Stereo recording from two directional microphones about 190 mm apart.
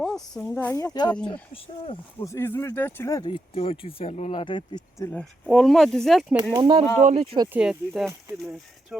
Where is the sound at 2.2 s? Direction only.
15° left (ahead or behind).